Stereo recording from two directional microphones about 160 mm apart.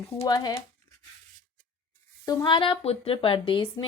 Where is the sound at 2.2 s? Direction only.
25° left (ahead or behind).